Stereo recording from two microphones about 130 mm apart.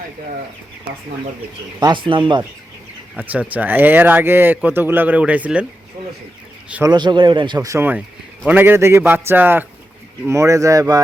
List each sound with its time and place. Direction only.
1.8 s speech: 40° right (ahead or behind)
3.2 s speech: 10° right (ahead or behind)
6.8 s speech: 35° right (ahead or behind)
7.7 s speech: 15° right (ahead or behind)